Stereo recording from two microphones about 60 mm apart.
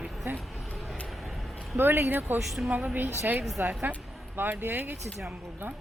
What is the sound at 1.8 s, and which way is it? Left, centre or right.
Speech, right.